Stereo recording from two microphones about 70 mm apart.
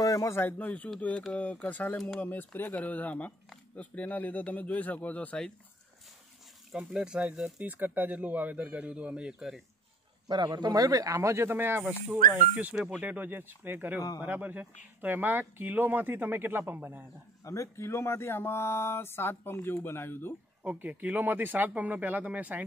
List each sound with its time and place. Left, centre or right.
0.0 s a sound: left
0.3 s speech: left
6.7 s speech: centre
7.6 s speech: right
10.2 s speech: right
17.5 s speech: left
20.6 s speech: right